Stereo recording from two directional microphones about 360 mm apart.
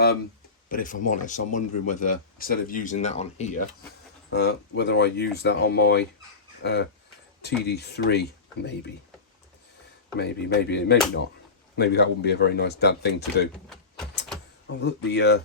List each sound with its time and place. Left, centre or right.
0.7 s speech: left
10.2 s speech: left
14.8 s speech: left